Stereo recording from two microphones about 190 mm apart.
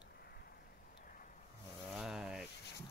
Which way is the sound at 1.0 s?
45° left (ahead or behind).